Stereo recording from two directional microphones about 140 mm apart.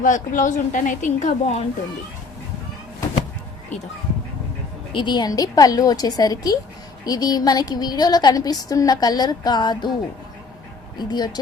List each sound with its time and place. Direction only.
0.0 s a woman's voice: 70° left (ahead or behind)
4.9 s speech: 35° left (ahead or behind)
10.9 s speech: 30° left (ahead or behind)